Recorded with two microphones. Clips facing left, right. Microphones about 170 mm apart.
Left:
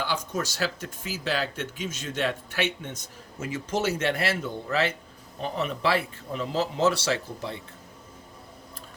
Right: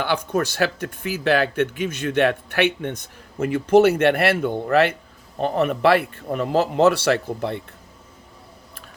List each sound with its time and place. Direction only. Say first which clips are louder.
0.0 s speech: right 7 dB; 60° right (ahead or behind)